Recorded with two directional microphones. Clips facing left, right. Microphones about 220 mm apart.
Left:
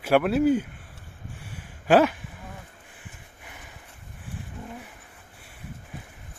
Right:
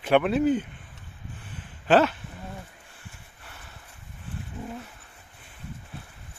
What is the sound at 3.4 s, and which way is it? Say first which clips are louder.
Dog: left 2 dB; 15° left (ahead or behind).